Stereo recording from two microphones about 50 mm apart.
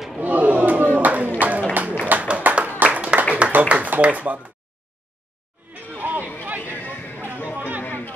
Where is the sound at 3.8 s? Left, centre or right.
Right.